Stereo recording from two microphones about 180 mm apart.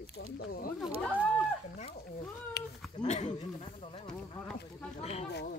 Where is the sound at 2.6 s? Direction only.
65° left (ahead or behind).